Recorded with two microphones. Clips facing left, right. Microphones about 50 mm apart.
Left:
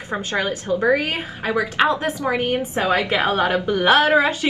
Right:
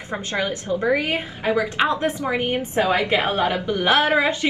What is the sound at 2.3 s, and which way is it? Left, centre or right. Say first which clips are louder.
Speech: left 2 dB; right.